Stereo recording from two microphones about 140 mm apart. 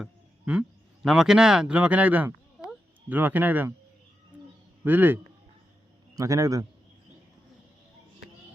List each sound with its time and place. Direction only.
0.0 s a sound: 5° right (ahead or behind)
1.0 s speech: 5° right (ahead or behind)
4.8 s a man's voice: 15° right (ahead or behind)